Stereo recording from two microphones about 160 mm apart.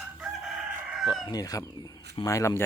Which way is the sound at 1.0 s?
25° left (ahead or behind).